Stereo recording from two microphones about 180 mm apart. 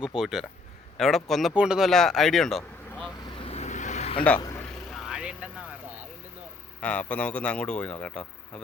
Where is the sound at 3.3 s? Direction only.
35° left (ahead or behind).